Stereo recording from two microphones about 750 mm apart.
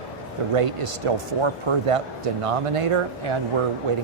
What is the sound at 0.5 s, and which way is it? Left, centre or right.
Speech, right.